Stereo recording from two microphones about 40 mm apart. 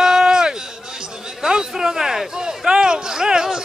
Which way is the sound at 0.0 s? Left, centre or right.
Centre.